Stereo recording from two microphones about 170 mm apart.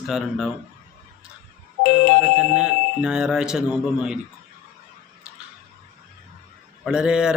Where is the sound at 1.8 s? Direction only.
65° left (ahead or behind).